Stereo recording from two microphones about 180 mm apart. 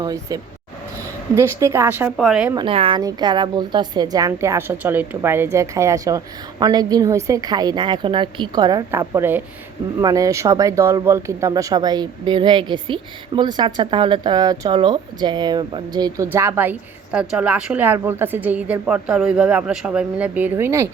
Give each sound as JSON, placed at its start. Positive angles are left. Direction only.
{"t": 0.0, "sound": "a woman's voice", "side_deg": -20}
{"t": 1.4, "sound": "speech", "side_deg": -15}
{"t": 2.1, "sound": "a woman's voice", "side_deg": 0}
{"t": 2.6, "sound": "a woman's voice", "side_deg": -30}
{"t": 8.9, "sound": "speech", "side_deg": -15}